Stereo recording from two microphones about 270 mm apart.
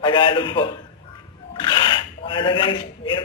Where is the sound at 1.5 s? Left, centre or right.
Centre.